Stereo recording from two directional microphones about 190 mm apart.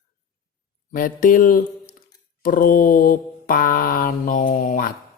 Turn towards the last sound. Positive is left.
turn(degrees=45)  # may be behind; listen again after turning